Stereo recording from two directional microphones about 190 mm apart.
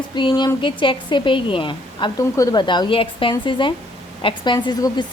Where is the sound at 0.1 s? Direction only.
25° left (ahead or behind).